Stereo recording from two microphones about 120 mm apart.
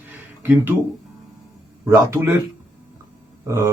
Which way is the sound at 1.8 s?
25° right (ahead or behind).